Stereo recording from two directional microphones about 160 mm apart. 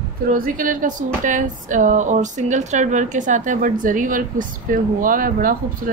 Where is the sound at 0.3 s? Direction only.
60° right (ahead or behind).